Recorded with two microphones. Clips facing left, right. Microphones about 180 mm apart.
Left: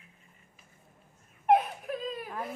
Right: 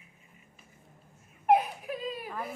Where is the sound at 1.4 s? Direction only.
Centre (ahead or behind).